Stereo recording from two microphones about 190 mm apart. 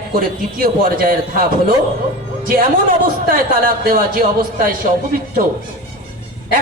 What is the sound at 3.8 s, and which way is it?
A woman's voice, 50° right (ahead or behind).